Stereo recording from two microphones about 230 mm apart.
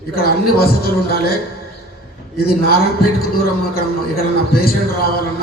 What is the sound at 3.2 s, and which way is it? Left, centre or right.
A man's voice, left.